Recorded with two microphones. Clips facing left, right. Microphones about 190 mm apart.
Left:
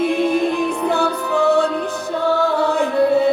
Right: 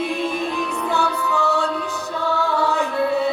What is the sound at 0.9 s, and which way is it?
Music, 55° left (ahead or behind).